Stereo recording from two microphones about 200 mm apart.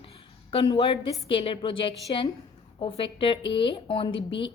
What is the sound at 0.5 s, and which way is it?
Speech, 25° left (ahead or behind).